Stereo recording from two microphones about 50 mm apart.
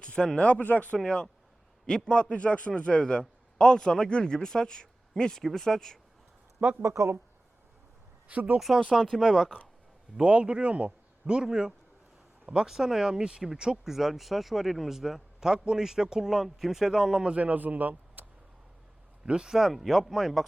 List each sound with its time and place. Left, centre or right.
0.0 s a man's voice: centre
0.4 s speech: left
0.9 s a man's voice: centre
5.4 s a man's voice: centre
6.6 s speech: right
6.8 s speech: right
8.3 s speech: right
8.5 s a man's voice: centre
10.2 s speech: right; by 17.2 s centre
17.2 s speech: right
19.2 s a man's voice: centre